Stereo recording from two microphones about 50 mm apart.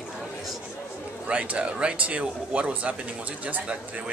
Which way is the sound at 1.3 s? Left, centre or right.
Right.